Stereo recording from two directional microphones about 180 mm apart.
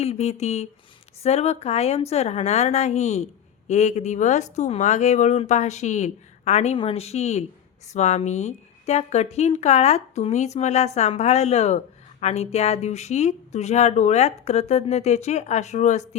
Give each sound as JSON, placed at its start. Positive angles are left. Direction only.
{"t": 0.0, "sound": "a woman's voice", "side_deg": 35}